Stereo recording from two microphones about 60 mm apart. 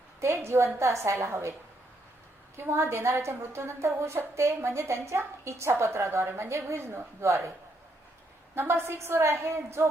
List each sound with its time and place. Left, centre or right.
0.2 s a woman's voice: right
2.6 s a woman's voice: right
8.5 s a woman's voice: right